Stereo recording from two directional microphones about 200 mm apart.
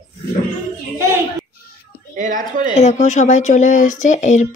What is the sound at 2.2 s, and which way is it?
Speech, 40° right (ahead or behind).